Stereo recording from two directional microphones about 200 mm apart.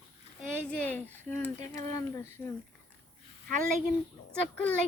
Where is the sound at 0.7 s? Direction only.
10° left (ahead or behind).